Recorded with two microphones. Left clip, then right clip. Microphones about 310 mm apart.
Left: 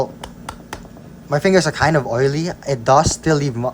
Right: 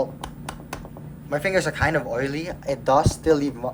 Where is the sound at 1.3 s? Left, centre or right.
Centre.